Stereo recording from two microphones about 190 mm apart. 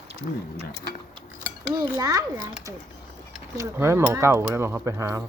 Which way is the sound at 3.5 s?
15° right (ahead or behind).